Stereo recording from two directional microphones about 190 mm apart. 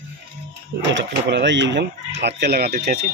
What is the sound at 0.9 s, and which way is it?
Speech, 65° right (ahead or behind).